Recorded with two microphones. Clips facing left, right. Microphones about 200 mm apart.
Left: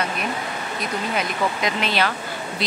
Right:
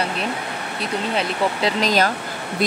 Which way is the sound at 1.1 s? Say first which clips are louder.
Right 2 dB; 35° right (ahead or behind).